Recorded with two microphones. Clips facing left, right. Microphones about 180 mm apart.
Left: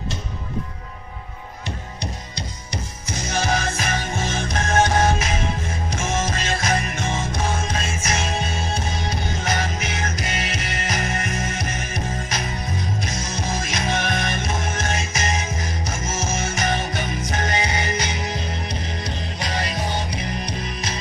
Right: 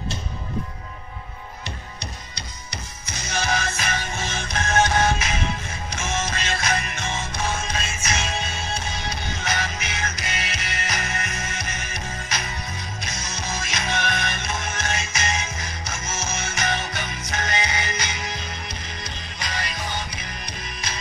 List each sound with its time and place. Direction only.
2.7 s music: 45° left (ahead or behind)
19.4 s music: 35° left (ahead or behind)